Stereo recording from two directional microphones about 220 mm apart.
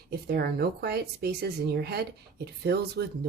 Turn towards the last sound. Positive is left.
turn(degrees=-45)  # may be behind; listen again after turning